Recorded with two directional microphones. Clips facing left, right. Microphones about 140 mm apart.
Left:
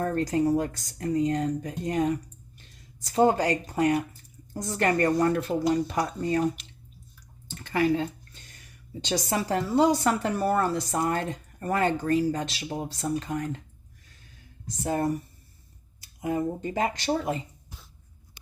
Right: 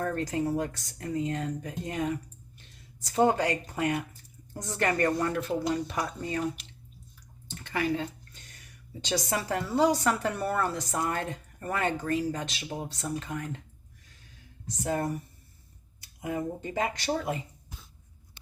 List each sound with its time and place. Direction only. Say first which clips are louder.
0.0 s a woman's voice: left 5 dB; 35° left (ahead or behind)
3.2 s a woman's voice: left 3 dB; 35° left (ahead or behind)
7.6 s a sound: left 5 dB; 35° left (ahead or behind)
9.0 s a woman's voice: left 3 dB; 35° left (ahead or behind)
16.2 s a woman's voice: left 4 dB; 35° left (ahead or behind)